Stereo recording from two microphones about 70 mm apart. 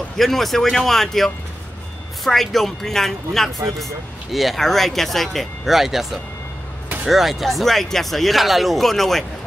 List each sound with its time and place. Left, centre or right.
0.2 s speech: centre